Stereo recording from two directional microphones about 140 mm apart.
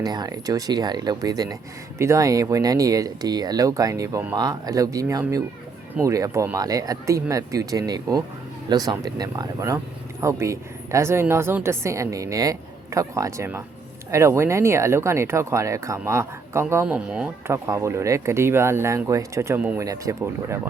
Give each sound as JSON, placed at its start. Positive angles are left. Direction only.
{"t": 0.0, "sound": "speech", "side_deg": -30}
{"t": 17.4, "sound": "speech", "side_deg": -20}